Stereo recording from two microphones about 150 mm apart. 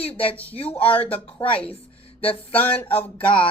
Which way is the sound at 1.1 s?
40° left (ahead or behind).